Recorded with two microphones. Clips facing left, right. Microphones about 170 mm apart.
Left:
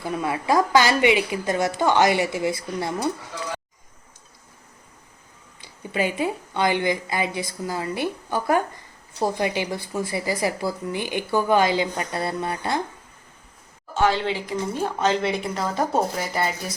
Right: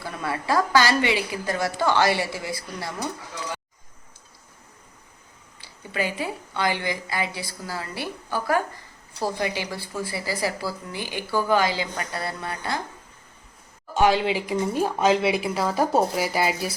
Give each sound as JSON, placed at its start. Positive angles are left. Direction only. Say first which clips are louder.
{"t": 0.0, "sound": "speech", "louder": "left 4 dB", "side_deg": 20}
{"t": 5.5, "sound": "speech", "louder": "left 3 dB", "side_deg": 20}
{"t": 13.9, "sound": "speech", "louder": "right 2 dB", "side_deg": -15}